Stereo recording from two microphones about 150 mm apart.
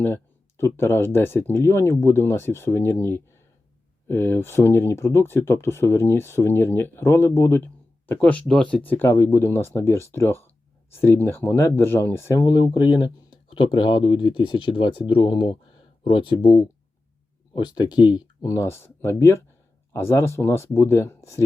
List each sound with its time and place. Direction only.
0.0 s speech: 15° left (ahead or behind)